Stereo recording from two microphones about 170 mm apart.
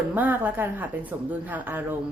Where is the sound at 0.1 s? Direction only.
10° right (ahead or behind).